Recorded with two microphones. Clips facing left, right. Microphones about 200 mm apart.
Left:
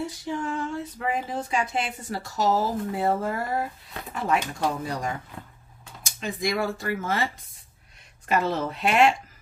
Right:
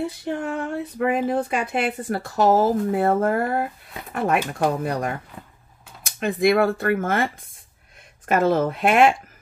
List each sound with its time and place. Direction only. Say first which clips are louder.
0.0 s speech: right 4 dB; 60° right (ahead or behind)
8.3 s speech: right 6 dB; 50° right (ahead or behind)